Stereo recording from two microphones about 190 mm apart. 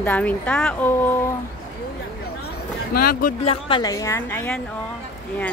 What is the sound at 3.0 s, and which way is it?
Speech, 50° left (ahead or behind).